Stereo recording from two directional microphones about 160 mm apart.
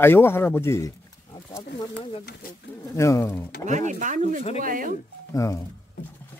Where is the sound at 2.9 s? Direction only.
20° left (ahead or behind).